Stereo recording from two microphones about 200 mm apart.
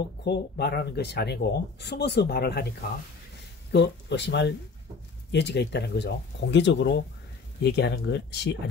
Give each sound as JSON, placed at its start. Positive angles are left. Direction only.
{"t": 0.2, "sound": "speech", "side_deg": 55}
{"t": 3.7, "sound": "speech", "side_deg": 60}